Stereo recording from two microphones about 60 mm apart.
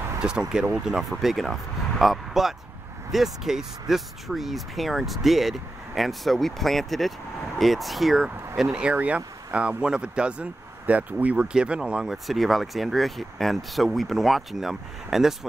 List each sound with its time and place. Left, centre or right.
0.2 s speech: centre
1.1 s speech: centre
8.9 s speech: right
12.3 s speech: centre